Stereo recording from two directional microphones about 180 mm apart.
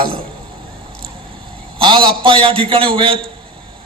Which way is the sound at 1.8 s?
25° right (ahead or behind).